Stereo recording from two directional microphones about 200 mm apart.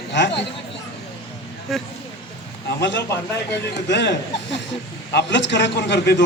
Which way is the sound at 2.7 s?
65° left (ahead or behind).